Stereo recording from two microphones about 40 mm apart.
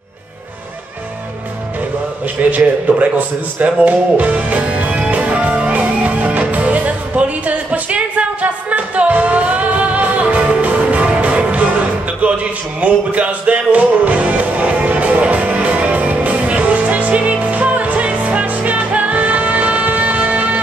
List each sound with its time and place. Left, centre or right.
2.5 s a man's voice: right
5.0 s music: right